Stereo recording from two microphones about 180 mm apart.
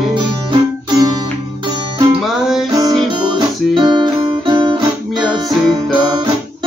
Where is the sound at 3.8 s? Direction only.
25° right (ahead or behind).